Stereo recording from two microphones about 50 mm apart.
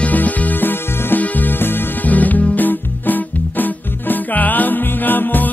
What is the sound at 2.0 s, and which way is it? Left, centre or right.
Music, left.